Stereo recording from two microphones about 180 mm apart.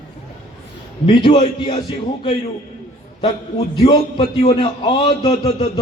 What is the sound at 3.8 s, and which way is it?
A man's voice, 30° left (ahead or behind).